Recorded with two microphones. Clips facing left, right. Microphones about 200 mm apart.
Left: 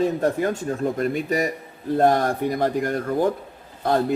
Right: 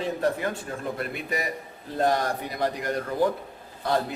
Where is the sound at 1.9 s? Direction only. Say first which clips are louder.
Left 5 dB; 50° left (ahead or behind).